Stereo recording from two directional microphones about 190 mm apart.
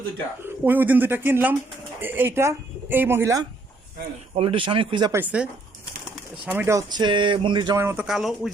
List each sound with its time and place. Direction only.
0.4 s speech: 10° right (ahead or behind)
4.4 s speech: 30° right (ahead or behind)
5.1 s speech: 10° right (ahead or behind); by 7.8 s 25° right (ahead or behind)
7.8 s speech: 10° right (ahead or behind)